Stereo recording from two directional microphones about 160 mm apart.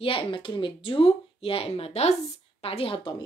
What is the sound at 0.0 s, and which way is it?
A woman's voice, 35° left (ahead or behind).